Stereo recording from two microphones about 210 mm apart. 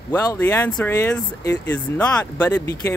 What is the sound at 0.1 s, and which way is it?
Speech, 10° left (ahead or behind).